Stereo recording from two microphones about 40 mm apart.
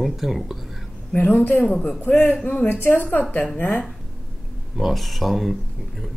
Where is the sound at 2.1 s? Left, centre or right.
Left.